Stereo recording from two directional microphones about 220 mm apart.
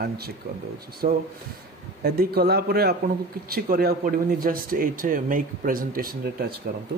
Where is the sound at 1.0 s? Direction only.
40° right (ahead or behind).